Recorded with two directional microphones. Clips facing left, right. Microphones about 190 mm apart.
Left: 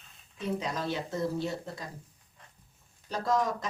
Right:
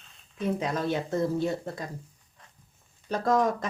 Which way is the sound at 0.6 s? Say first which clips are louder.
Right 5 dB; 50° right (ahead or behind).